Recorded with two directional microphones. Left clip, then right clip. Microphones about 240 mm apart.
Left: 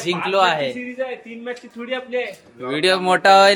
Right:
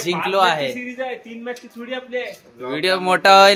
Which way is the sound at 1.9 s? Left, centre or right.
Left.